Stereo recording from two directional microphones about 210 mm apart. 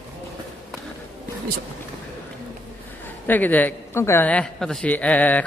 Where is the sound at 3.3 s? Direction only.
10° left (ahead or behind).